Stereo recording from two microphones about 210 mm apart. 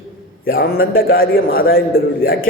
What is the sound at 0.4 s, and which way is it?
A man's voice, 45° left (ahead or behind).